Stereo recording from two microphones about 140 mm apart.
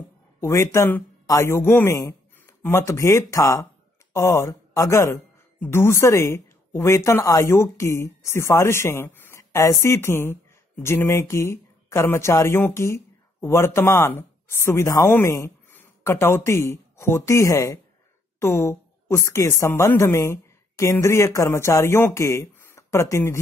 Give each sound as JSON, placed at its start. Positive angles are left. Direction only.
{"t": 0.4, "sound": "a woman's voice", "side_deg": 20}